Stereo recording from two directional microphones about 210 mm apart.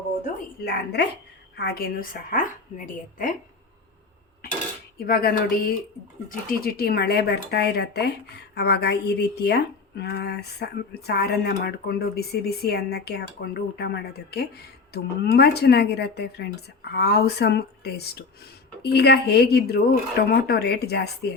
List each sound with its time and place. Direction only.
0.6 s speech: 50° left (ahead or behind)
5.0 s speech: 45° left (ahead or behind)